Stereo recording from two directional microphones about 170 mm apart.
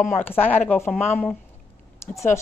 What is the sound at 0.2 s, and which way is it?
Speech, 10° left (ahead or behind).